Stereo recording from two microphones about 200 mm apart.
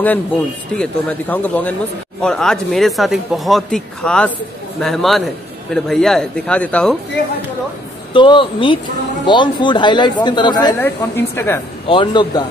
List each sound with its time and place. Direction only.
0.7 s a man's voice: 5° left (ahead or behind)
8.1 s a woman's voice: 25° left (ahead or behind)
10.8 s speech: 10° left (ahead or behind)
11.9 s a woman's voice: 25° left (ahead or behind)